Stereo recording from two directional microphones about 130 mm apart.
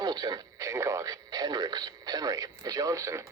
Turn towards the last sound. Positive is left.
turn(degrees=-25)  # may be behind; listen again after turning